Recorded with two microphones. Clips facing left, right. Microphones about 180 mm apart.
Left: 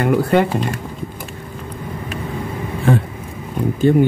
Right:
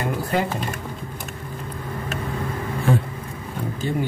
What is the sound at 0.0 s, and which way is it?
Speech, 70° left (ahead or behind).